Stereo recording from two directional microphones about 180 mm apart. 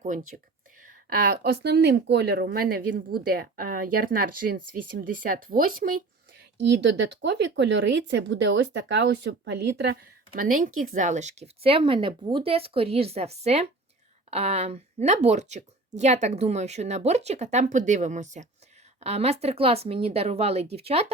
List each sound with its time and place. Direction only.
0.0 s speech: 45° right (ahead or behind)
1.1 s speech: 60° right (ahead or behind)
6.7 s speech: 75° right (ahead or behind); by 21.1 s 35° right (ahead or behind)